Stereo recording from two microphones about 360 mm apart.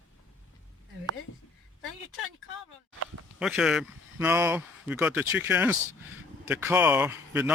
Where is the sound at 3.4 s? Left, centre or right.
Centre.